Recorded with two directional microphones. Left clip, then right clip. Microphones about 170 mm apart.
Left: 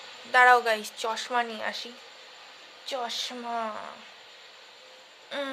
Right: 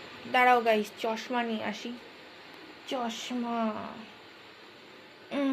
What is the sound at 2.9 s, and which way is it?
Speech, 25° left (ahead or behind).